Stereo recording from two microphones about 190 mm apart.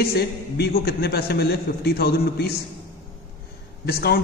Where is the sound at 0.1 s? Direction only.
55° left (ahead or behind).